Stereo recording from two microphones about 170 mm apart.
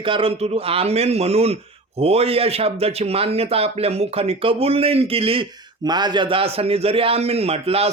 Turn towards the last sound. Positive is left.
turn(degrees=-35)  # may be behind; listen again after turning